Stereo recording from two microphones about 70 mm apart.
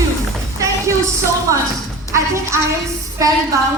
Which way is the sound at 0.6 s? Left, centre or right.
Right.